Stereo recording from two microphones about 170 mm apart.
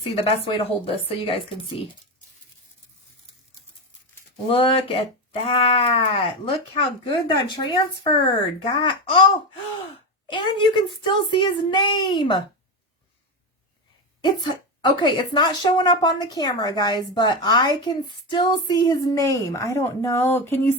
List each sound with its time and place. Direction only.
0.0 s speech: 35° left (ahead or behind)
4.4 s speech: 30° left (ahead or behind)
10.2 s speech: 30° left (ahead or behind)
14.2 s speech: 25° left (ahead or behind)